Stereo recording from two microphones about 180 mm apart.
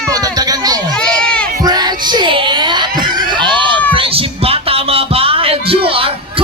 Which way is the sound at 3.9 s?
30° right (ahead or behind).